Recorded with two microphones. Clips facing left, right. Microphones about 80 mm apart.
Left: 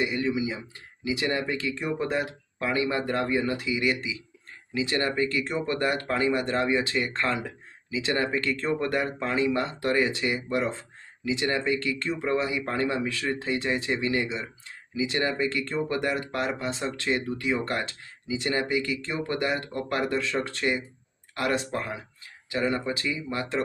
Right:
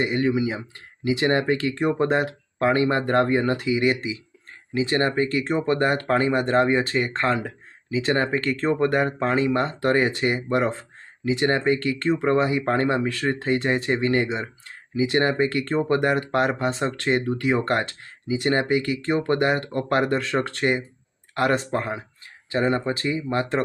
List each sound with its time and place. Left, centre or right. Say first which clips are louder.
0.0 s speech: right 5 dB; right